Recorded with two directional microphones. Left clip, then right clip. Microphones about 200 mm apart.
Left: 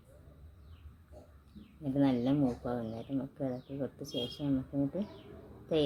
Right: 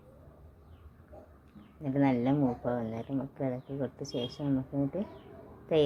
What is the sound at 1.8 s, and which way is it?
Speech, 20° right (ahead or behind).